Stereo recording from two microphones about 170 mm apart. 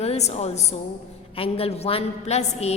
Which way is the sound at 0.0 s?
40° left (ahead or behind).